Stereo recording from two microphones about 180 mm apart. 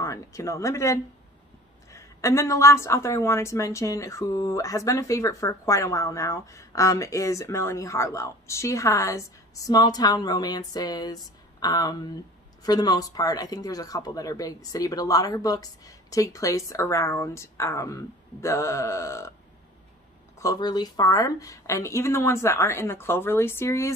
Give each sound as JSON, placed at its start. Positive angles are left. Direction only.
{"t": 0.0, "sound": "a woman's voice", "side_deg": 15}
{"t": 20.3, "sound": "a woman's voice", "side_deg": 20}